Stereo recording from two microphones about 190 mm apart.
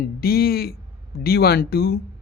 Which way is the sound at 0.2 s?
55° left (ahead or behind).